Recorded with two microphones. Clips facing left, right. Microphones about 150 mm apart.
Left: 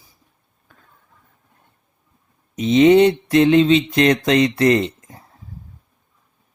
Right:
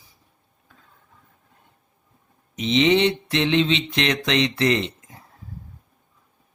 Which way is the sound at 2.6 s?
45° left (ahead or behind).